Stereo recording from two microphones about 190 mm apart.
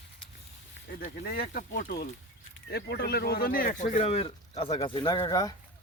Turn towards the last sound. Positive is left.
turn(degrees=20)  # may be behind; listen again after turning